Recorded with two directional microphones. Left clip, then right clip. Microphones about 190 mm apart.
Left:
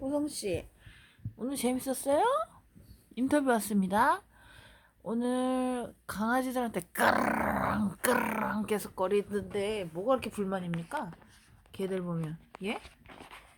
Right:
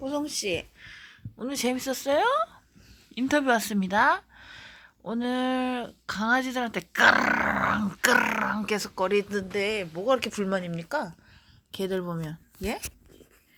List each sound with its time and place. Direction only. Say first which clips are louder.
0.4 s a woman's voice: right 5 dB; 5° right (ahead or behind); by 12.8 s 30° right (ahead or behind)